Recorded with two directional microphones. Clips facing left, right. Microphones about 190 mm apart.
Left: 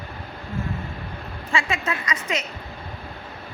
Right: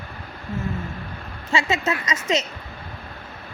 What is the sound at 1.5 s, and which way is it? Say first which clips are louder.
Speech: right 3 dB; 25° right (ahead or behind).